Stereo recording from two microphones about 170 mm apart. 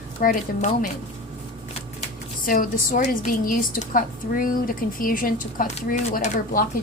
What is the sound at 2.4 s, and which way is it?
A woman's voice, 55° left (ahead or behind).